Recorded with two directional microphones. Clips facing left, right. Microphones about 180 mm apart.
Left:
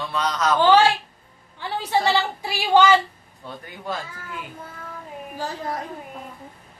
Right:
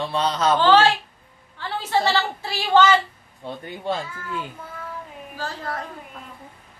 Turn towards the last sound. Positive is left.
turn(degrees=15)  # may be behind; listen again after turning